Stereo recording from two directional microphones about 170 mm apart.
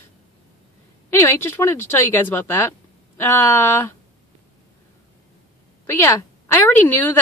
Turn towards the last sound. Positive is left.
turn(degrees=15)  # may be behind; listen again after turning